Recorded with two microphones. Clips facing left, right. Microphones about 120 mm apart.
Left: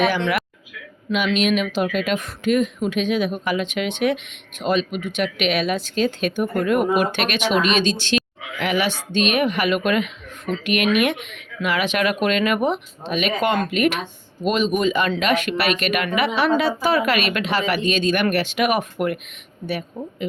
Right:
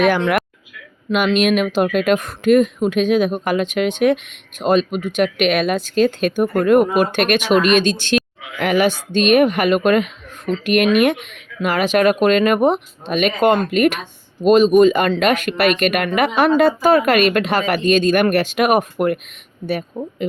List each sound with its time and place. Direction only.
0.0 s speech: 50° right (ahead or behind)